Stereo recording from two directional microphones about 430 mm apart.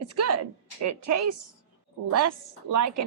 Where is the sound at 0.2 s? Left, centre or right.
Right.